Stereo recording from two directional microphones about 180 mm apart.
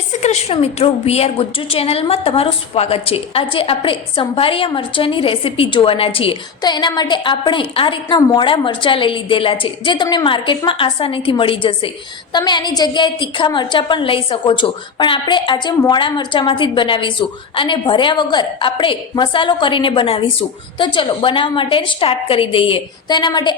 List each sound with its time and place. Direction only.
0.2 s a woman's voice: 35° left (ahead or behind)